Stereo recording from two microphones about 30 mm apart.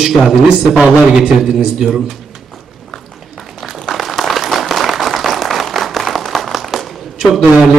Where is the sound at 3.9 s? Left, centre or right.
Centre.